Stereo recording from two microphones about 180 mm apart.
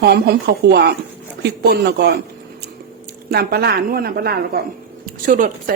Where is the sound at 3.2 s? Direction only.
60° right (ahead or behind).